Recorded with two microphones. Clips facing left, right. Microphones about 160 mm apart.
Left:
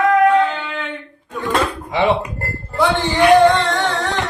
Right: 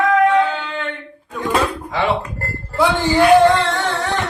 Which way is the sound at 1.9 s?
20° left (ahead or behind).